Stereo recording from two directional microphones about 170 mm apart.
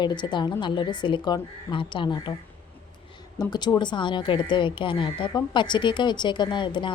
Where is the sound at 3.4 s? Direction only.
25° left (ahead or behind).